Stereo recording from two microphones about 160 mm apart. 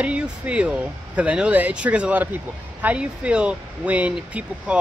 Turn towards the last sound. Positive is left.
turn(degrees=-10)  # may be behind; listen again after turning